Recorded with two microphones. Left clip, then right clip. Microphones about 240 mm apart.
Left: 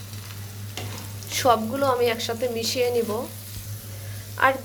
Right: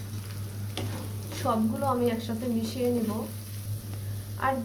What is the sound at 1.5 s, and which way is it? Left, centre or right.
A woman's voice, left.